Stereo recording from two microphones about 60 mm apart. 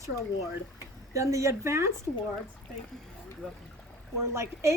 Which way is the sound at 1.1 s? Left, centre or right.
Right.